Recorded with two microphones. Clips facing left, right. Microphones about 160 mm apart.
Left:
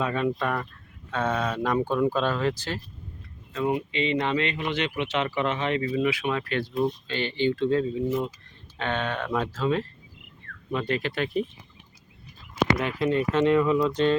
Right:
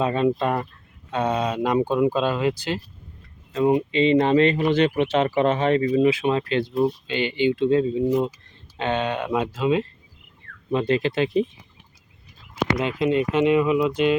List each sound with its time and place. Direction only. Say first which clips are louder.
0.0 s speech: right 5 dB; 25° right (ahead or behind)
1.1 s speech: right 4 dB; 15° right (ahead or behind)
3.9 s speech: right 8 dB; 35° right (ahead or behind)
6.1 s speech: right 6 dB; 30° right (ahead or behind)
6.7 s speech: right 3 dB; 10° right (ahead or behind)
12.7 s speech: right 6 dB; 20° right (ahead or behind)